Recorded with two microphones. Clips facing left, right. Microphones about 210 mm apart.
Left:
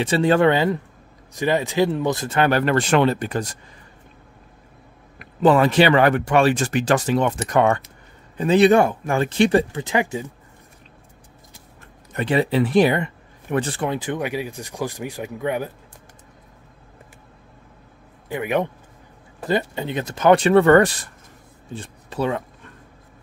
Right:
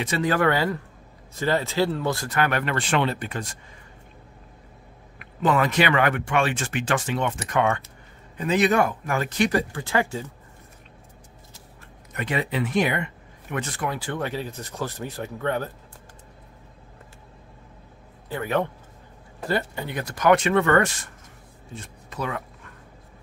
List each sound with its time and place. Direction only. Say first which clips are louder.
0.0 s speech: left 6 dB; 30° left (ahead or behind)
5.2 s speech: left 6 dB; 30° left (ahead or behind)
12.1 s speech: left 7 dB; 30° left (ahead or behind); by 15.7 s 10° left (ahead or behind)
18.3 s speech: left 3 dB; 15° left (ahead or behind)